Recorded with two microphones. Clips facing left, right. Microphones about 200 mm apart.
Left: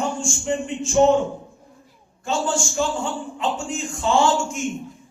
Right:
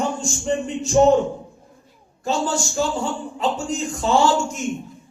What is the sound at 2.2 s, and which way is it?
A man's voice, 35° right (ahead or behind).